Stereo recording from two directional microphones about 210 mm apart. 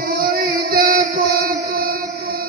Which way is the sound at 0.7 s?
45° right (ahead or behind).